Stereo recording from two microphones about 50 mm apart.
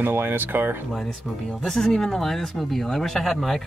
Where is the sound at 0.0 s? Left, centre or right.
Right.